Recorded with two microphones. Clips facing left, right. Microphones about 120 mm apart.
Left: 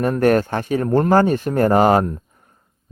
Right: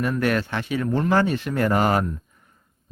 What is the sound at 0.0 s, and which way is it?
A man's voice, 45° left (ahead or behind).